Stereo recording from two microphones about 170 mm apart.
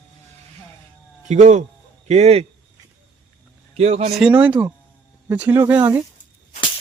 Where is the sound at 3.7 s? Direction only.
40° right (ahead or behind).